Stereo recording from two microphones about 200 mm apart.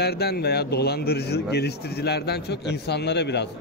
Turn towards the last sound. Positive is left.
turn(degrees=60)  # may be behind; listen again after turning